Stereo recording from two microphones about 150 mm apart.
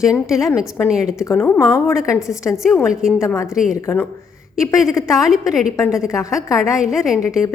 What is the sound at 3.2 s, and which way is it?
Speech, 20° left (ahead or behind).